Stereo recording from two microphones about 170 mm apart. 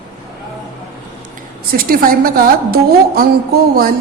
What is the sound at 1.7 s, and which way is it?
A woman's voice, 60° right (ahead or behind).